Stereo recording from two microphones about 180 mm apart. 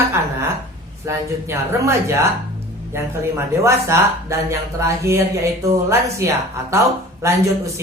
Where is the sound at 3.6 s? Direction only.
15° right (ahead or behind).